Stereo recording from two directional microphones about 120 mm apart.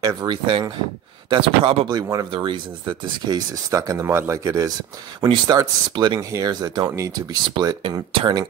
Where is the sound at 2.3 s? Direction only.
45° right (ahead or behind).